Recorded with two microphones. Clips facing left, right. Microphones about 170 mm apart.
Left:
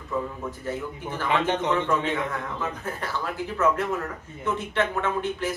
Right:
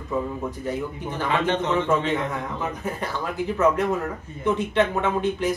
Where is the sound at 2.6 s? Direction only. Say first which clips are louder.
Right 3 dB; 15° right (ahead or behind).